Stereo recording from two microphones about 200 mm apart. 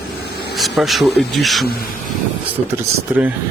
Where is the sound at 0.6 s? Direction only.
Centre (ahead or behind).